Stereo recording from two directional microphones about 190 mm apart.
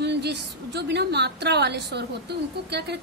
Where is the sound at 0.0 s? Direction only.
60° right (ahead or behind).